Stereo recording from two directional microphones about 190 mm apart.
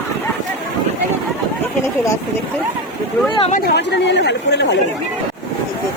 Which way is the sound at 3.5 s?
60° left (ahead or behind).